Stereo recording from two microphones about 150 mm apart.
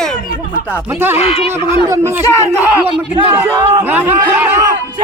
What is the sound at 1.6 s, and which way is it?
Speech, 35° left (ahead or behind).